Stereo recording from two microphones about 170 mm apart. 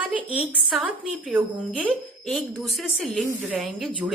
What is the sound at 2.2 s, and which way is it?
A woman's voice, 5° left (ahead or behind).